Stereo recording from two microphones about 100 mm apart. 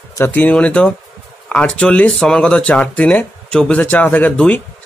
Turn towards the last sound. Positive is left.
turn(degrees=15)  # may be behind; listen again after turning